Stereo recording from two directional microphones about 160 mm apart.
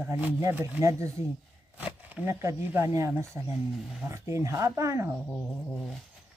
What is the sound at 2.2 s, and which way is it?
Speech, 20° right (ahead or behind).